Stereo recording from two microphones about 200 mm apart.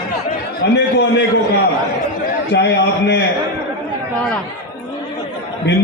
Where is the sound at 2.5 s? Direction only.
60° left (ahead or behind).